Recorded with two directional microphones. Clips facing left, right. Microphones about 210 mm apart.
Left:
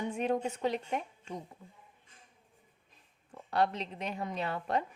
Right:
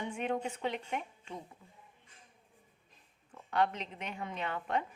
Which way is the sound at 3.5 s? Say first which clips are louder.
Left 1 dB; 35° left (ahead or behind).